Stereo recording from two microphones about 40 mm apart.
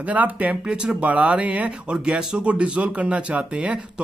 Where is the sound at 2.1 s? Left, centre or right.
Centre.